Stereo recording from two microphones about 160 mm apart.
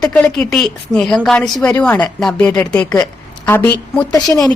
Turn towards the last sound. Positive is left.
turn(degrees=20)  # may be behind; listen again after turning